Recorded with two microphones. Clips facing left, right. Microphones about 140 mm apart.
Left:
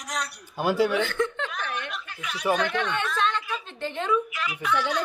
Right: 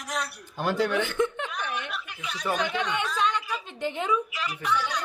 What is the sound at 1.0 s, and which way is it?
Speech, 15° right (ahead or behind).